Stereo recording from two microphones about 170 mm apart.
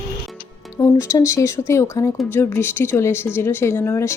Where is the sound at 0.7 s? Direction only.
15° left (ahead or behind).